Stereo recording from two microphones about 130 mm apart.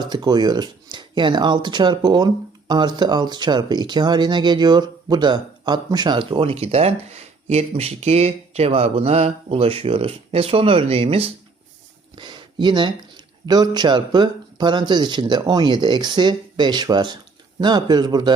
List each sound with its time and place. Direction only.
0.0 s speech: 35° right (ahead or behind); by 11.3 s 50° right (ahead or behind)
12.1 s speech: 35° right (ahead or behind)